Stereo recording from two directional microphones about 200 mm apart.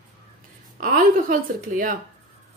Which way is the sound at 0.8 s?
45° right (ahead or behind).